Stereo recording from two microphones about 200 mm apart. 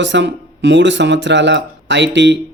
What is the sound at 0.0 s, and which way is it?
Speech, 60° right (ahead or behind).